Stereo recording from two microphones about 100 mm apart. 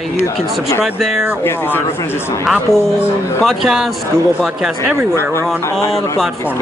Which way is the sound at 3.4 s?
Centre (ahead or behind).